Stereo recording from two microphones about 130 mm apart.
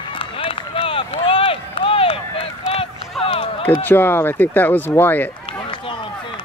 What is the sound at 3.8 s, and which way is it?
Speech, 15° left (ahead or behind).